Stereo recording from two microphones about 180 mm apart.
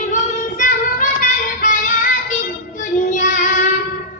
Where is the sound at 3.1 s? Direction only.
45° left (ahead or behind).